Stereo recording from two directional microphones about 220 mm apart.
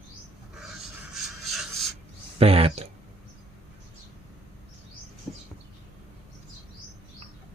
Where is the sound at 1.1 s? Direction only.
Centre (ahead or behind).